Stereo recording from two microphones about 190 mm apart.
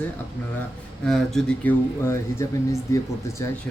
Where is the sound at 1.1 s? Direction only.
Centre (ahead or behind).